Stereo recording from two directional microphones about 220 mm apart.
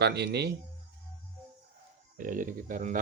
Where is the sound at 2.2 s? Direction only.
35° right (ahead or behind).